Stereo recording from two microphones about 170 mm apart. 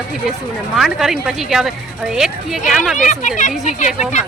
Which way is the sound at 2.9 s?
45° left (ahead or behind).